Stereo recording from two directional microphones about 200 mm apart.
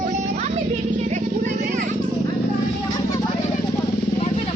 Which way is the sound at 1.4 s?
40° right (ahead or behind).